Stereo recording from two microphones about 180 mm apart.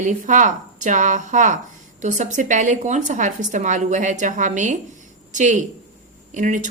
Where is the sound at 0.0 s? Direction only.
45° right (ahead or behind).